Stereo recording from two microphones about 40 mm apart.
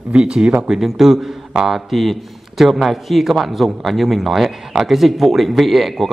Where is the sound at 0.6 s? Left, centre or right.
Centre.